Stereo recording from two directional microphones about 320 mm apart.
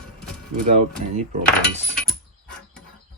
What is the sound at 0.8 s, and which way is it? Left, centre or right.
Cutlery, right.